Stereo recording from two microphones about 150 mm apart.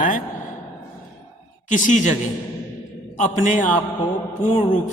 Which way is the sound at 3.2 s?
55° left (ahead or behind).